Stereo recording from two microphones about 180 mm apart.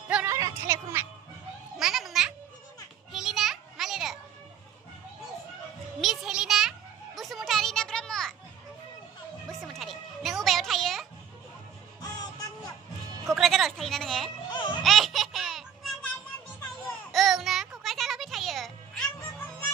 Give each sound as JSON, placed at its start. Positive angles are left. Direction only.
{"t": 0.1, "sound": "music", "side_deg": -15}
{"t": 1.8, "sound": "a sound", "side_deg": -5}
{"t": 3.1, "sound": "children playing", "side_deg": 0}
{"t": 5.9, "sound": "music", "side_deg": 0}
{"t": 7.2, "sound": "children playing", "side_deg": 0}
{"t": 9.5, "sound": "a sound", "side_deg": 0}
{"t": 12.0, "sound": "music", "side_deg": 20}
{"t": 13.3, "sound": "a sound", "side_deg": 0}
{"t": 14.5, "sound": "music", "side_deg": 25}
{"t": 14.8, "sound": "baby laughter", "side_deg": 0}
{"t": 17.1, "sound": "music", "side_deg": 0}